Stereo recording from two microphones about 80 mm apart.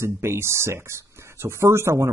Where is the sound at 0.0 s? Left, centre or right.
Right.